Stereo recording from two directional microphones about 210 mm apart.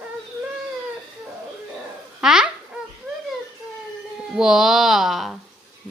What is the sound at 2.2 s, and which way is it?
Speech, 5° right (ahead or behind).